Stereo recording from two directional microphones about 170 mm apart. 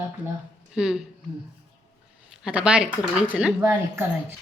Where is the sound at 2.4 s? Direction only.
5° right (ahead or behind).